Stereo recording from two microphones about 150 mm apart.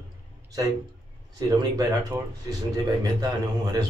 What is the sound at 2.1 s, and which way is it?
A man's voice, 20° right (ahead or behind).